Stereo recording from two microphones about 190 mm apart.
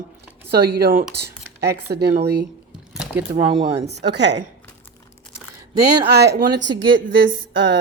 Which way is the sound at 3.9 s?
65° right (ahead or behind).